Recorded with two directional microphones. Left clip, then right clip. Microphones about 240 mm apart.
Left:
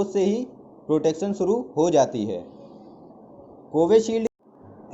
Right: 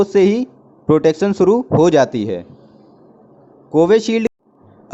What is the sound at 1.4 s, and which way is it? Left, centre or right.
Speech, right.